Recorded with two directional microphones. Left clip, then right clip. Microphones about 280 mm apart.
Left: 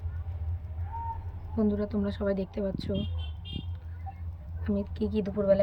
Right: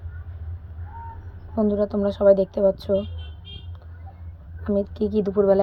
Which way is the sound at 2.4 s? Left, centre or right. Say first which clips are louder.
Right 14 dB; centre.